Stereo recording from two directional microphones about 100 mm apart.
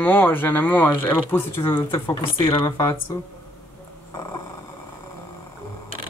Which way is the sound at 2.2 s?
60° left (ahead or behind).